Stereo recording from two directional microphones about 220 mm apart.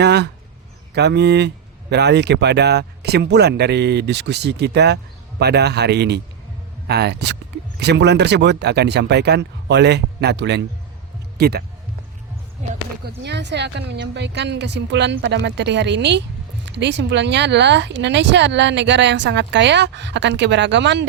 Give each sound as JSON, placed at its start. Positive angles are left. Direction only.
{"t": 0.0, "sound": "speech", "side_deg": -50}
{"t": 13.1, "sound": "speech", "side_deg": -50}